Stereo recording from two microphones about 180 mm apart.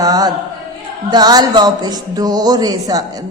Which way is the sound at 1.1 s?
20° right (ahead or behind).